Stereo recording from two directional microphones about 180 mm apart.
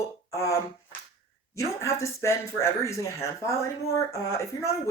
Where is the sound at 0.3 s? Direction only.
15° left (ahead or behind).